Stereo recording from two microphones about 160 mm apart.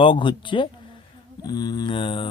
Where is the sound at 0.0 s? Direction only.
30° left (ahead or behind).